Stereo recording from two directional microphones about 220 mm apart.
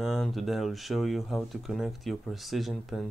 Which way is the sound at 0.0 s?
Centre (ahead or behind).